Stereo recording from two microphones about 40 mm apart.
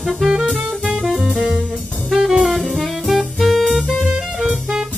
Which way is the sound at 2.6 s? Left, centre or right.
Centre.